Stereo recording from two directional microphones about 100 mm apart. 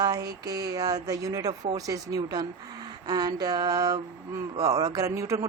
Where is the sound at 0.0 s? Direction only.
40° right (ahead or behind).